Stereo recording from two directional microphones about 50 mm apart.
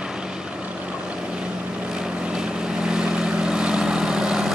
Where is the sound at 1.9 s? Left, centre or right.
Centre.